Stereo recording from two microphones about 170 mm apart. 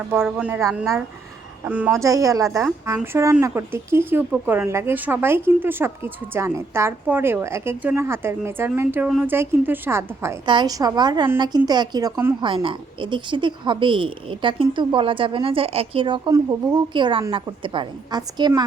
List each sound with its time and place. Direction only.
0.3 s speech: 5° right (ahead or behind)
10.4 s a woman's voice: 25° right (ahead or behind)